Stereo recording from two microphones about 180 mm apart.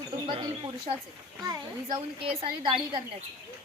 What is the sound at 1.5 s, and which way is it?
A woman's voice, 30° right (ahead or behind).